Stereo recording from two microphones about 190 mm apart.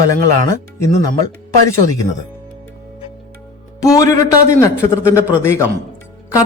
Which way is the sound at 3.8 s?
20° left (ahead or behind).